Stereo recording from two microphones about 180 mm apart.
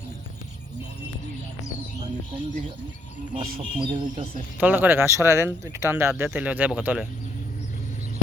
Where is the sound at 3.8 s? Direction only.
30° right (ahead or behind).